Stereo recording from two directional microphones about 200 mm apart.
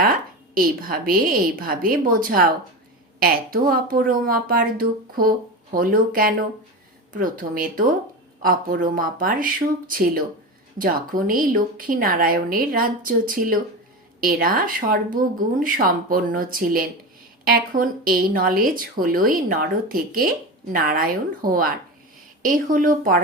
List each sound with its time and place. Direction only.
0.5 s speech: 45° right (ahead or behind)